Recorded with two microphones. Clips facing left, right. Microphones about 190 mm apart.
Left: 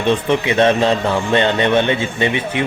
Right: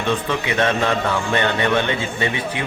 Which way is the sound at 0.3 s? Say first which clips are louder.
Left 6 dB; 25° left (ahead or behind).